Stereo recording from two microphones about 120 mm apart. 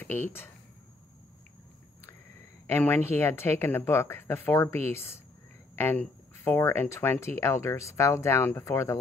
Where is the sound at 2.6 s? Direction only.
20° left (ahead or behind).